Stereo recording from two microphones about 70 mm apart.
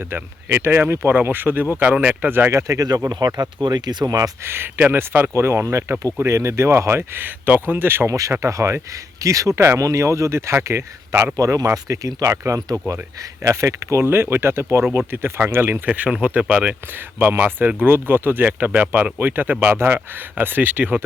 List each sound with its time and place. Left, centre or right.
0.0 s speech: right
2.3 s speech: right
2.6 s speech: right
3.1 s speech: right
4.0 s speech: right
4.4 s speech: right
8.0 s speech: right
11.3 s speech: right
14.0 s speech: right; by 16.7 s centre
17.2 s speech: right